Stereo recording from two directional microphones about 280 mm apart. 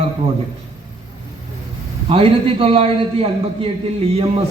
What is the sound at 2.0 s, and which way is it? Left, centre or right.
A man's voice, centre.